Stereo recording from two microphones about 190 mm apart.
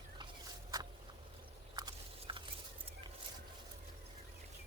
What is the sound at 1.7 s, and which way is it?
Biting, 25° right (ahead or behind).